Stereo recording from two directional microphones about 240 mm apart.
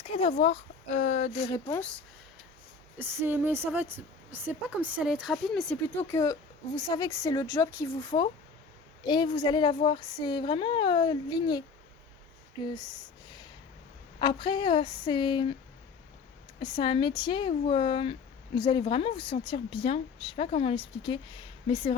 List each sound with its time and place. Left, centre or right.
0.1 s speech: left
1.5 s a woman's voice: centre
3.0 s a woman's voice: centre
8.1 s speech: left
9.0 s speech: centre
14.2 s speech: centre
16.6 s speech: left